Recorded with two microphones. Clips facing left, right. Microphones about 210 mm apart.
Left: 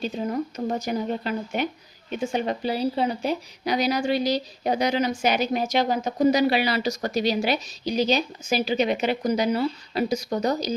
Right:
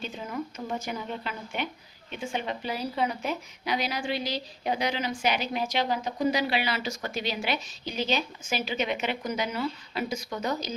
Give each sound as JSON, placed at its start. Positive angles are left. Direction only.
{"t": 0.0, "sound": "speech", "side_deg": 35}